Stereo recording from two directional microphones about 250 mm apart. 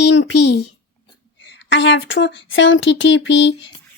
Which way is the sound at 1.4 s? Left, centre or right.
Left.